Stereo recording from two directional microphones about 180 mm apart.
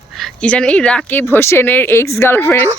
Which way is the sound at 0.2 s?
5° left (ahead or behind).